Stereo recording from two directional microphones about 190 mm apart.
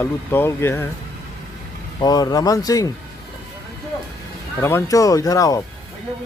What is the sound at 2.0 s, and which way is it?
Speech, 20° left (ahead or behind).